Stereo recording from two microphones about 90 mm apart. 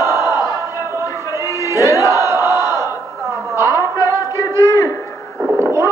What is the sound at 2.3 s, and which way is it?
Crowd, 35° right (ahead or behind).